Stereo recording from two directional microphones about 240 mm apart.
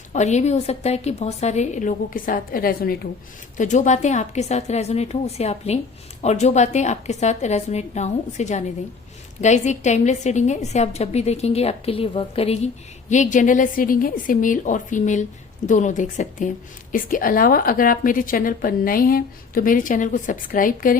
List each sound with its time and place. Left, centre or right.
0.1 s a woman's voice: left